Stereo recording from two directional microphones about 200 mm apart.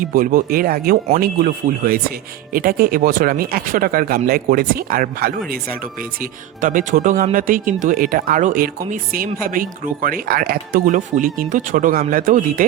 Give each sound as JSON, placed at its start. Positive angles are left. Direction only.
{"t": 0.0, "sound": "speech", "side_deg": -45}
{"t": 6.6, "sound": "speech", "side_deg": -45}